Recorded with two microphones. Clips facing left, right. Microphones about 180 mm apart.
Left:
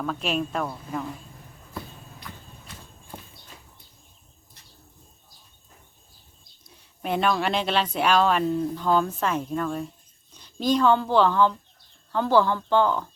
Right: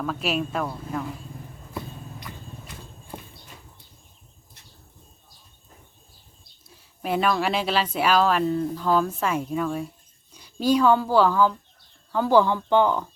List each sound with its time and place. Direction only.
0.0 s speech: 5° right (ahead or behind)
6.7 s speech: 5° right (ahead or behind)